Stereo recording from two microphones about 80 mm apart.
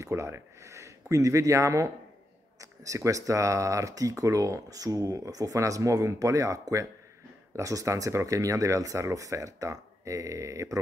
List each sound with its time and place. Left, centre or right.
0.0 s speech: right